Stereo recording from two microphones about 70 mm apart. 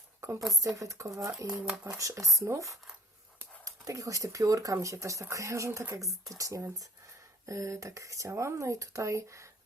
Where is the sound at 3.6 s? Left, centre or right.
Right.